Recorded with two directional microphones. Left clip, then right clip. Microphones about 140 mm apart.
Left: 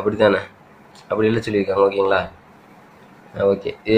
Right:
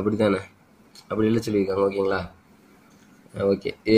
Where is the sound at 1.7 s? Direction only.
45° right (ahead or behind).